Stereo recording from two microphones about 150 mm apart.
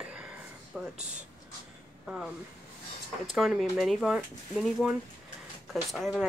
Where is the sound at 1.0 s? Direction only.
50° right (ahead or behind).